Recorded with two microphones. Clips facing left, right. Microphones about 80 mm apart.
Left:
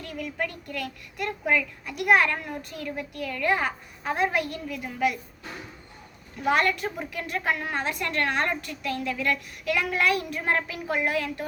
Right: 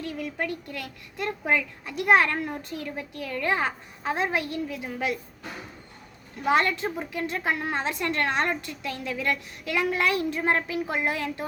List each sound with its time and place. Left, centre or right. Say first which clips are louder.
0.2 s a woman's voice: left 3 dB; right
6.4 s a woman's voice: even; right